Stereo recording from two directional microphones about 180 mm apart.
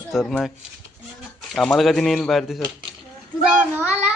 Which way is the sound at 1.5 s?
Centre (ahead or behind).